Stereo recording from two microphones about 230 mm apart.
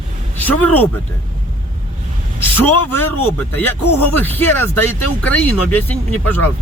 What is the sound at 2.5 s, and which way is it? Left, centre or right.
Speech, centre.